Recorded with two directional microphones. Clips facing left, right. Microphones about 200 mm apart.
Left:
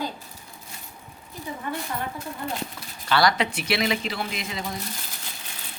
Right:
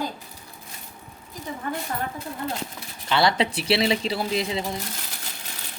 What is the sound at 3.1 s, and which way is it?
Speech, 25° right (ahead or behind).